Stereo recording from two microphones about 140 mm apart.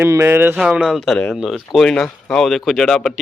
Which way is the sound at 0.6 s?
5° right (ahead or behind).